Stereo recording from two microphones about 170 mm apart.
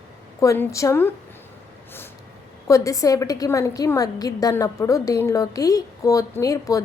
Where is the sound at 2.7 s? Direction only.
20° left (ahead or behind).